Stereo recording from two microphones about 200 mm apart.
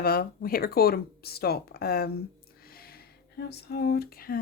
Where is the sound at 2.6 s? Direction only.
50° left (ahead or behind).